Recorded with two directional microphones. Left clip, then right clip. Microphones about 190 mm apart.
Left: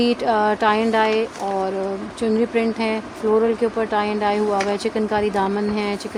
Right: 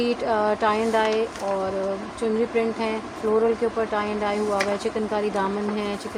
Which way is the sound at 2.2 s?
55° left (ahead or behind).